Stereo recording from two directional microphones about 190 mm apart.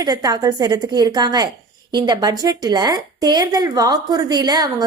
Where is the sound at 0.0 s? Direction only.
20° right (ahead or behind).